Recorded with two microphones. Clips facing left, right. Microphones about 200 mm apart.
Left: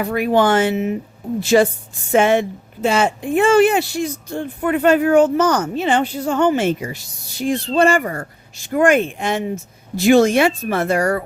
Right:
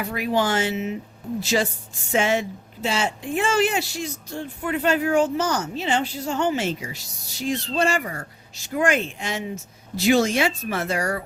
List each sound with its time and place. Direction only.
0.0 s a woman's voice: 55° left (ahead or behind)